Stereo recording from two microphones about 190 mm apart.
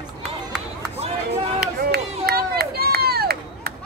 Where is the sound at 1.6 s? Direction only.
55° right (ahead or behind).